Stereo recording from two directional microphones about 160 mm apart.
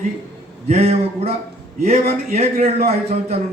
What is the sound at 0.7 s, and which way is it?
A man's voice, 45° right (ahead or behind).